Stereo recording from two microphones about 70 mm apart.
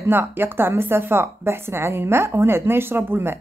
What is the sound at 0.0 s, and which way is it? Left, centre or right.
Speech, right.